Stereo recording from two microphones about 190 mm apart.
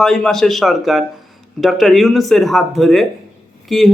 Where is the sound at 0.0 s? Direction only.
Centre (ahead or behind).